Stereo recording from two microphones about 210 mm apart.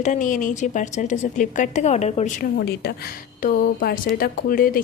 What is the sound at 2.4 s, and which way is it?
A woman's voice, 50° left (ahead or behind).